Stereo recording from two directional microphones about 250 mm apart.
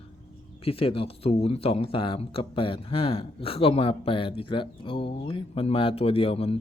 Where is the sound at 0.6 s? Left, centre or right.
Left.